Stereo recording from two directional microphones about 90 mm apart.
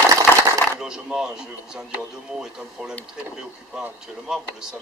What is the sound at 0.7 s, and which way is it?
Speech, 10° right (ahead or behind).